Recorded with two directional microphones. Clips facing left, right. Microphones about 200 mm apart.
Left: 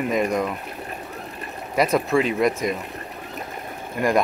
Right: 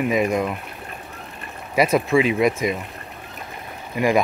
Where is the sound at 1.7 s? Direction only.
5° right (ahead or behind).